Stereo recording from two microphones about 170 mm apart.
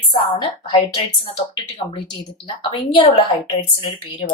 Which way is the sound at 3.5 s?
35° left (ahead or behind).